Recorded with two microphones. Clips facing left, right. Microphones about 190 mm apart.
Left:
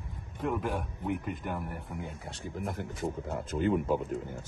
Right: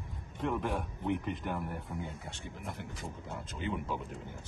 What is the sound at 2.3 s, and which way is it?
Speech, 45° left (ahead or behind).